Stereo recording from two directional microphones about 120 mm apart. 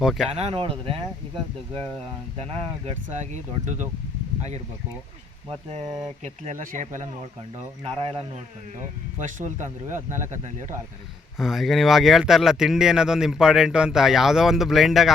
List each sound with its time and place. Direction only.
0.0 s speech: centre (ahead or behind)
0.3 s speech: 60° right (ahead or behind)
2.4 s speech: 60° right (ahead or behind); by 3.8 s 80° right
6.2 s speech: 85° right
8.8 s speech: 90° right
11.3 s speech: centre (ahead or behind)